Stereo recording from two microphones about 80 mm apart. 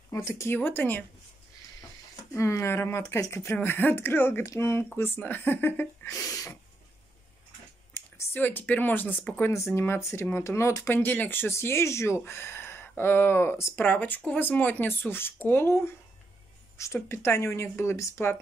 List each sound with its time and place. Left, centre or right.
0.2 s speech: left
0.6 s speech: left
2.3 s speech: left
6.0 s speech: left
7.9 s speech: left
9.5 s speech: left
11.0 s speech: left
13.8 s speech: left